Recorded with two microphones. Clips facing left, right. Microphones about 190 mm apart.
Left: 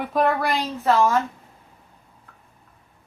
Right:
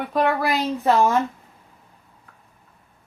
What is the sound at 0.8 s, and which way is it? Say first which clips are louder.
Speech: even; 20° right (ahead or behind).